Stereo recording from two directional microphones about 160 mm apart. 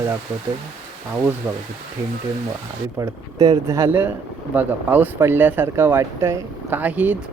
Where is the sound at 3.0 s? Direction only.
25° right (ahead or behind).